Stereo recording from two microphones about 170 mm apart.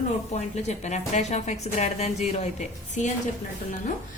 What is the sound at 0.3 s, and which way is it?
A woman's voice, 40° left (ahead or behind).